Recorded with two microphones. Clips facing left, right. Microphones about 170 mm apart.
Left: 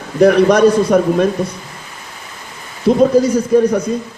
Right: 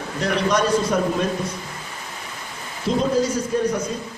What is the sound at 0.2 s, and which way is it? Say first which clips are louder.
A man's voice: left 12 dB; 60° left (ahead or behind).